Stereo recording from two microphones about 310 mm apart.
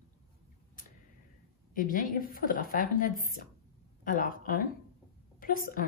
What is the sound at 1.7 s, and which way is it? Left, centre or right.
A woman's voice, left.